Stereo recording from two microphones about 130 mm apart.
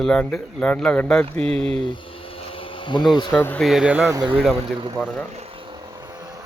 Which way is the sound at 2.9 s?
35° left (ahead or behind).